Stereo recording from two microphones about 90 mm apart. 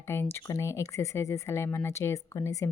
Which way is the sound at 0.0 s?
30° left (ahead or behind).